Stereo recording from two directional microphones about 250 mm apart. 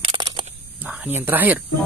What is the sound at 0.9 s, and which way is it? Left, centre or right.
Speech, centre.